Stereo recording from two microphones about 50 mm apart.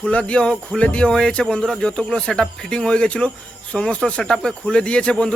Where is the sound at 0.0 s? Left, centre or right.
Left.